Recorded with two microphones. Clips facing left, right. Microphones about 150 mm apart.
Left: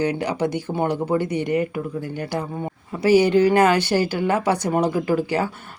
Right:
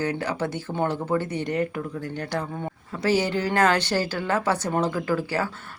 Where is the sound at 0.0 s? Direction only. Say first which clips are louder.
Left 4 dB; 15° left (ahead or behind).